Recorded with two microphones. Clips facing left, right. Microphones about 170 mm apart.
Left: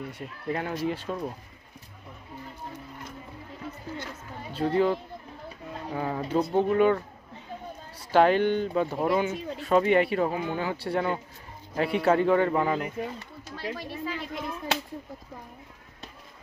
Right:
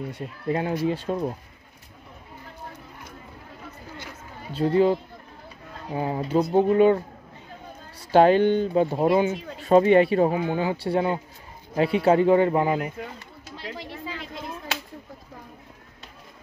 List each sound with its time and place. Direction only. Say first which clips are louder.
0.5 s speech: right 5 dB; 25° right (ahead or behind)
4.6 s speech: right 4 dB; 30° right (ahead or behind)
5.9 s speech: right 4 dB; 25° right (ahead or behind)
6.7 s speech: right 4 dB; 25° right (ahead or behind)
8.1 s speech: right 4 dB; 25° right (ahead or behind)